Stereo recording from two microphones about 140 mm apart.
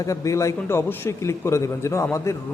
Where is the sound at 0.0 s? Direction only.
25° left (ahead or behind).